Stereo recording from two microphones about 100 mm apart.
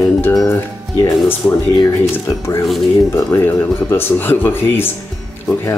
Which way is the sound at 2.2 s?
25° left (ahead or behind).